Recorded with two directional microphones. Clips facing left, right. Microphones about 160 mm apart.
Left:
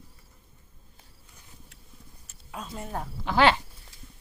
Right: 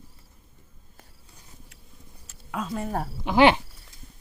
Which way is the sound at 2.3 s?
90° right.